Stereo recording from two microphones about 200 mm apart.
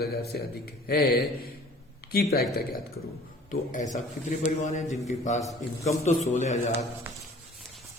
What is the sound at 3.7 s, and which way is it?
A man's voice, 40° left (ahead or behind).